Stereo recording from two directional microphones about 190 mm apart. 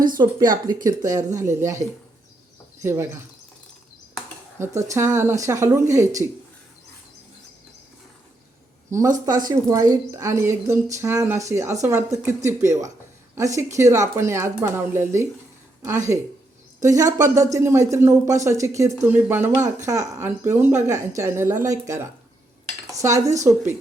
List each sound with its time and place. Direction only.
0.2 s speech: 20° right (ahead or behind)
0.5 s speech: 45° right (ahead or behind)
1.0 s speech: 15° right (ahead or behind)
2.8 s speech: 15° right (ahead or behind)
4.6 s speech: 15° right (ahead or behind)
8.9 s speech: 15° right (ahead or behind)